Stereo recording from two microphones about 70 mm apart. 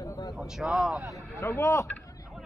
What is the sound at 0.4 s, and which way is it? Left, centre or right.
Speech, centre.